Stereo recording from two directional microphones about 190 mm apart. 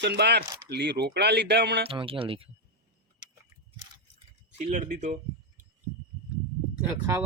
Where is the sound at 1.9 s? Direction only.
30° right (ahead or behind).